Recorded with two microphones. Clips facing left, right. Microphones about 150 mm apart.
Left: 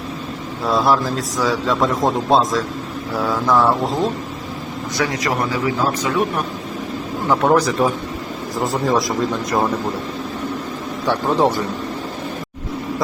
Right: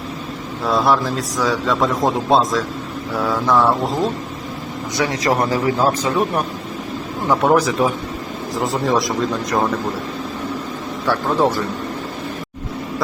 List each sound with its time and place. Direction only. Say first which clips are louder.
0.6 s a man's voice: even; centre (ahead or behind)
4.9 s a man's voice: right 3 dB; 35° right (ahead or behind)
7.3 s a man's voice: even; 5° right (ahead or behind)
11.0 s a man's voice: left 1 dB; 15° left (ahead or behind)